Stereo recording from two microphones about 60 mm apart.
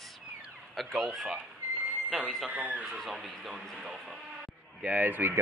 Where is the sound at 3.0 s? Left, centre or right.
Centre.